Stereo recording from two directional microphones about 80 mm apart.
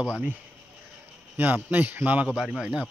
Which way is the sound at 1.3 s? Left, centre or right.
Right.